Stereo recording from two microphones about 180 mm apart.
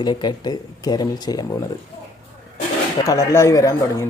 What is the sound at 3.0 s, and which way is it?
Speech, 15° left (ahead or behind).